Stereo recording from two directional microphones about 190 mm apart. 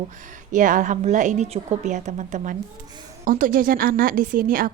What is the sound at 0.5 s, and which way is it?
A woman's voice, 45° right (ahead or behind).